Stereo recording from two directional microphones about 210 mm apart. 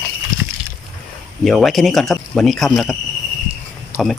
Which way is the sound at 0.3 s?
40° right (ahead or behind).